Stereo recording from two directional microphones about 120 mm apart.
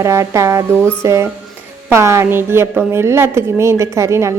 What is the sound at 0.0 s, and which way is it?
A woman's voice, 25° right (ahead or behind).